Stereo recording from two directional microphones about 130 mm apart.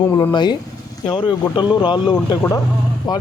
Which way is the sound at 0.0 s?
25° left (ahead or behind).